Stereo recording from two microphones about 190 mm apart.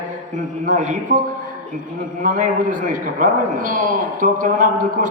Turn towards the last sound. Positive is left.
turn(degrees=-45)  # may be behind; listen again after turning